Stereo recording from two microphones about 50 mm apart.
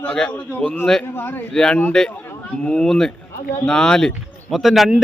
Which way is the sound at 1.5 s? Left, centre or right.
Centre.